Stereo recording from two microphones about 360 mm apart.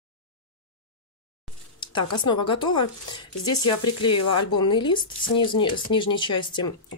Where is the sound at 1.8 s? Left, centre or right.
Centre.